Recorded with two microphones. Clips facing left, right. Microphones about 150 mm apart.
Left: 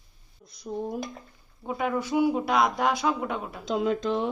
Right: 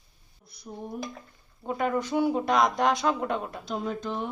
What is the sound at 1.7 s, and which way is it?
Speech, 5° left (ahead or behind).